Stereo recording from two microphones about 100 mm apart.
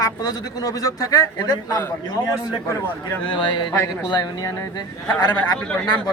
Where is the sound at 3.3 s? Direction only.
50° left (ahead or behind).